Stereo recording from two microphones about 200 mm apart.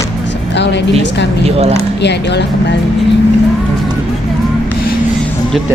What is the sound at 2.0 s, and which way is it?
Speech, 60° left (ahead or behind).